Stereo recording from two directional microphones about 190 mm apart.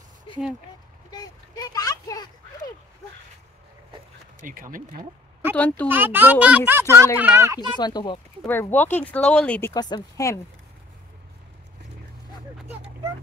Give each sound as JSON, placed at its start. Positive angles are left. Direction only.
{"t": 1.1, "sound": "a sound", "side_deg": 20}
{"t": 4.4, "sound": "speech", "side_deg": -45}
{"t": 5.6, "sound": "speech", "side_deg": 10}
{"t": 5.9, "sound": "speech", "side_deg": -10}
{"t": 7.7, "sound": "speech", "side_deg": 20}
{"t": 8.5, "sound": "speech", "side_deg": 10}
{"t": 9.8, "sound": "speech", "side_deg": 20}